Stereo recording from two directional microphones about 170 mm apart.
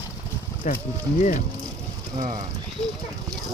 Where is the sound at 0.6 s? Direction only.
45° left (ahead or behind).